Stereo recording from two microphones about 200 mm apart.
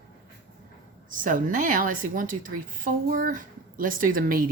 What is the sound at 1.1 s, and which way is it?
A woman's voice, 40° right (ahead or behind).